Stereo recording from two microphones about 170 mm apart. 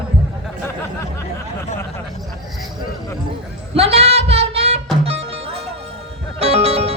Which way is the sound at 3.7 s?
35° right (ahead or behind).